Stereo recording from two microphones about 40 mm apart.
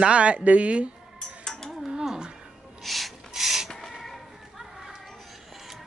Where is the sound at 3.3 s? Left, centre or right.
Centre.